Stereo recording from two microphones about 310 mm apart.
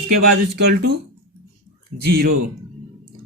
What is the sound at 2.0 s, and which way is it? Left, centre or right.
Speech, right.